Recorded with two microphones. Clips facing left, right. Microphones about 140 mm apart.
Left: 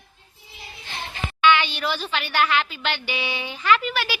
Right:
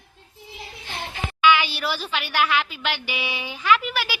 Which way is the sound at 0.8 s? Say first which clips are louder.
Right 1 dB; 10° right (ahead or behind).